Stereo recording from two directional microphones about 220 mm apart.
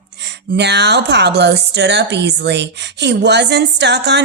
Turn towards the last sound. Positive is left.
turn(degrees=-50)  # may be behind; listen again after turning